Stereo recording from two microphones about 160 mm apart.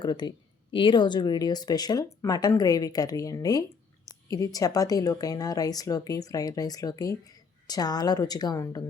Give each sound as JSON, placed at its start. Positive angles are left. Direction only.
{"t": 0.0, "sound": "speech", "side_deg": 30}